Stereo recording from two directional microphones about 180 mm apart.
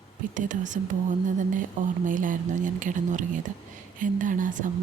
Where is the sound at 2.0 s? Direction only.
45° right (ahead or behind).